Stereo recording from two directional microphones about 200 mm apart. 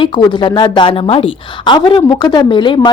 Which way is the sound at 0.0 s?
25° left (ahead or behind).